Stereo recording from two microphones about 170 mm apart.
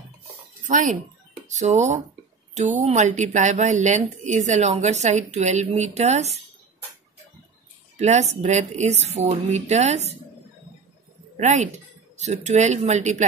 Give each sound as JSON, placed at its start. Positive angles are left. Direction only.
{"t": 0.7, "sound": "speech", "side_deg": -45}
{"t": 8.0, "sound": "speech", "side_deg": -40}
{"t": 11.3, "sound": "speech", "side_deg": -45}